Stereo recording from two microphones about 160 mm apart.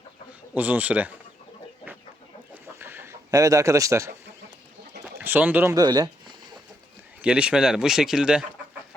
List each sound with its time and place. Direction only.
0.5 s speech: 10° right (ahead or behind)
2.7 s chicken: 15° right (ahead or behind)
5.1 s speech: 10° right (ahead or behind)
5.7 s speech: 25° right (ahead or behind)
7.2 s speech: 5° right (ahead or behind)